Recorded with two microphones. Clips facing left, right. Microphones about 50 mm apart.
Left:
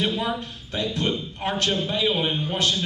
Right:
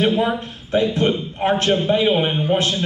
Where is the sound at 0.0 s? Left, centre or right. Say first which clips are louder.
Right 7 dB; right.